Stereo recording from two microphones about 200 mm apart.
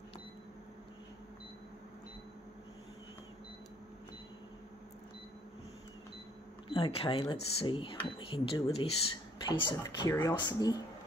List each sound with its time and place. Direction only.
6.7 s speech: 25° left (ahead or behind)